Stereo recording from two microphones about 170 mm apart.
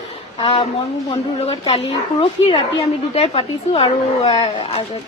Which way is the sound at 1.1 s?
25° left (ahead or behind).